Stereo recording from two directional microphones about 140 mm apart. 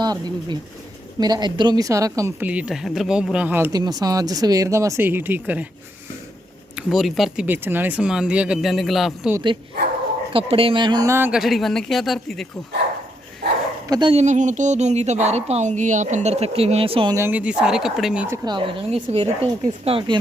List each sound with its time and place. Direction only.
0.0 s speech: 30° right (ahead or behind)
2.4 s speech: 10° right (ahead or behind)
3.7 s speech: 30° right (ahead or behind); by 5.6 s 10° right (ahead or behind)
6.7 s speech: centre (ahead or behind)
7.4 s speech: 15° right (ahead or behind)
10.3 s speech: 40° right (ahead or behind)
11.1 s speech: 15° right (ahead or behind)
11.3 s speech: centre (ahead or behind)
13.8 s speech: 25° right (ahead or behind)
14.1 s speech: 55° right (ahead or behind); by 17.2 s 40° right (ahead or behind)
17.2 s speech: 15° right (ahead or behind)
18.4 s speech: 35° right (ahead or behind)
18.9 s speech: 50° right (ahead or behind)